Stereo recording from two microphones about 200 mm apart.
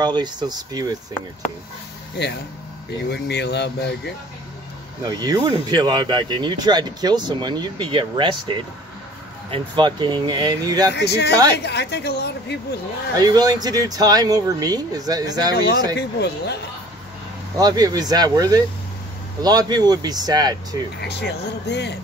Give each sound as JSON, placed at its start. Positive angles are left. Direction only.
{"t": 0.0, "sound": "speech", "side_deg": -20}
{"t": 2.2, "sound": "a woman's voice", "side_deg": 55}
{"t": 5.0, "sound": "speech", "side_deg": -20}
{"t": 11.0, "sound": "a woman's voice", "side_deg": 55}
{"t": 13.1, "sound": "speech", "side_deg": -20}
{"t": 16.0, "sound": "a woman's voice", "side_deg": 55}
{"t": 17.6, "sound": "speech", "side_deg": -20}
{"t": 21.0, "sound": "a woman's voice", "side_deg": 55}